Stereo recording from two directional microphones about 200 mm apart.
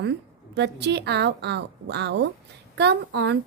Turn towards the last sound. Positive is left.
turn(degrees=-60)  # may be behind; listen again after turning